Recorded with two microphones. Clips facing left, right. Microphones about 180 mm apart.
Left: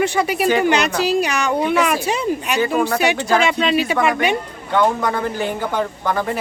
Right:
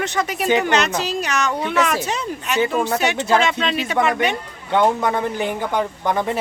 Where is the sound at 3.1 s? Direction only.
25° right (ahead or behind).